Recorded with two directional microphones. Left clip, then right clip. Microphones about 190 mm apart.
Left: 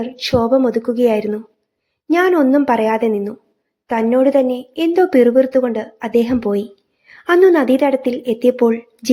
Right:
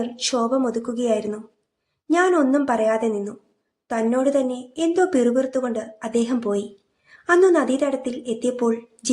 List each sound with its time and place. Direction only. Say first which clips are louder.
0.0 s a woman's voice: left 6 dB; 15° left (ahead or behind)